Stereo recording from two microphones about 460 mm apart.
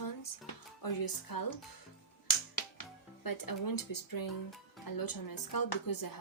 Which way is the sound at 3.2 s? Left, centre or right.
Left.